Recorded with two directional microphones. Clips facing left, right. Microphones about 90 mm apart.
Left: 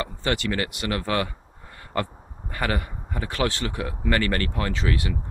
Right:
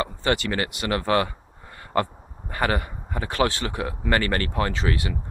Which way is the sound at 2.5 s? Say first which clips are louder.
Right 3 dB; 35° right (ahead or behind).